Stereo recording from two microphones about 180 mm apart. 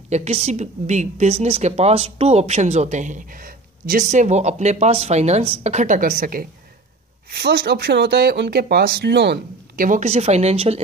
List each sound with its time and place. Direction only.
0.1 s speech: 35° right (ahead or behind); by 9.8 s 70° right (ahead or behind)
9.8 s speech: 40° right (ahead or behind)